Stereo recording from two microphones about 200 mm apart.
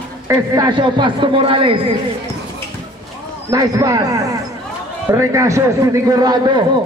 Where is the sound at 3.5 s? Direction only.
20° right (ahead or behind).